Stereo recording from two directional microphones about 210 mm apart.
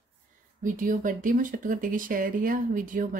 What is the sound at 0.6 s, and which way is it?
Speech, 40° right (ahead or behind).